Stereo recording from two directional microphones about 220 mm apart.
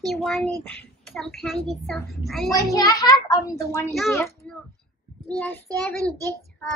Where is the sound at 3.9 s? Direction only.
Centre (ahead or behind).